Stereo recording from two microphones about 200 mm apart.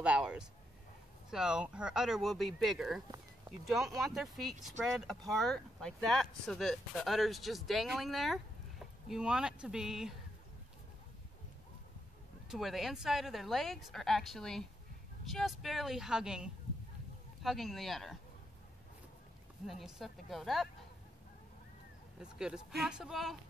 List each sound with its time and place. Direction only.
0.0 s a sound: 5° right (ahead or behind)
1.3 s speech: 5° right (ahead or behind)
12.4 s speech: centre (ahead or behind)
19.6 s speech: centre (ahead or behind)
22.2 s speech: 5° right (ahead or behind)